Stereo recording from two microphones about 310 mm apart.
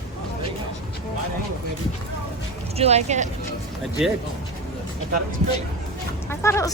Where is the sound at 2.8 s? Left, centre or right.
Right.